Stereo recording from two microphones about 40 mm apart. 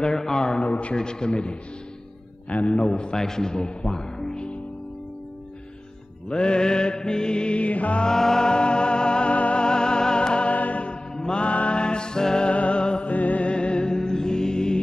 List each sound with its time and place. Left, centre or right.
0.0 s speech: centre
0.7 s a man's voice: left
0.9 s speech: left
3.2 s speech: centre
6.2 s mantra: left
8.0 s music: centre; by 11.0 s left
11.1 s mantra: centre
11.4 s music: left
13.1 s music: left; by 14.8 s centre